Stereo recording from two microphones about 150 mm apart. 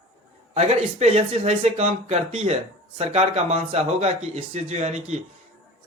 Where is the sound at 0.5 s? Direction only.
45° right (ahead or behind).